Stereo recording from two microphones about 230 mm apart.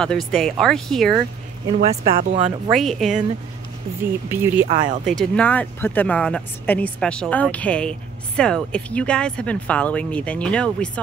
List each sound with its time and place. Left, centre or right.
0.0 s speech: centre
2.0 s speech: right
2.7 s speech: centre
5.0 s speech: centre